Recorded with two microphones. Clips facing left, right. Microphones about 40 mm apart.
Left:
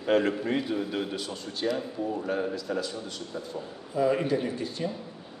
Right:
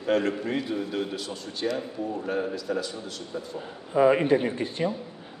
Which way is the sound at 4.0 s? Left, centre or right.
Right.